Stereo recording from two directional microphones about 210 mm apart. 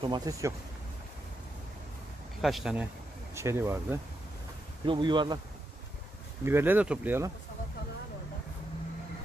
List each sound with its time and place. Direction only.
0.0 s speech: 20° right (ahead or behind)
2.4 s speech: centre (ahead or behind)
4.8 s speech: 20° right (ahead or behind)
6.4 s speech: 10° right (ahead or behind)